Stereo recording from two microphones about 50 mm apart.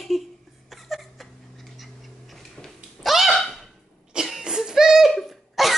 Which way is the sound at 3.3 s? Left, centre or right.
Centre.